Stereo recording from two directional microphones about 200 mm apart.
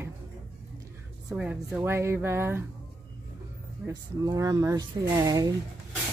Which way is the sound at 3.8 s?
15° right (ahead or behind).